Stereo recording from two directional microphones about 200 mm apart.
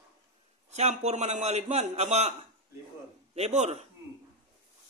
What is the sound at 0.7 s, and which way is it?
A man's voice, 35° right (ahead or behind).